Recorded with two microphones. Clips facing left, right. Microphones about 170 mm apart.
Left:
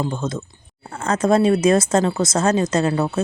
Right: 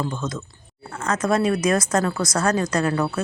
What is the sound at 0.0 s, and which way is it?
Speech, 30° left (ahead or behind).